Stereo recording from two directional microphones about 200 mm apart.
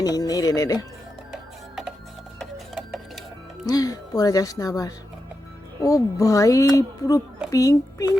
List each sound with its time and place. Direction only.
0.0 s speech: 20° left (ahead or behind)
2.4 s printer: centre (ahead or behind)
3.7 s speech: 20° left (ahead or behind)